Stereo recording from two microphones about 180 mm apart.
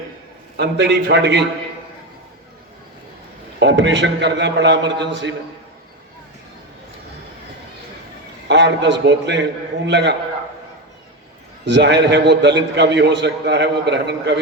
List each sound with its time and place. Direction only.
0.5 s a man's voice: 65° right (ahead or behind)
3.6 s a man's voice: 80° right
8.4 s a man's voice: 75° right (ahead or behind)
11.6 s a man's voice: 75° right (ahead or behind)